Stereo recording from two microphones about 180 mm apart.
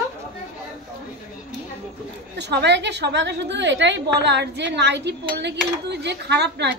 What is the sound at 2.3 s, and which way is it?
A woman's voice, 70° right (ahead or behind).